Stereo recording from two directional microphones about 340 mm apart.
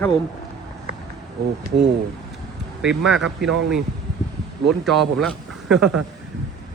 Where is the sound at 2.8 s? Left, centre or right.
Centre.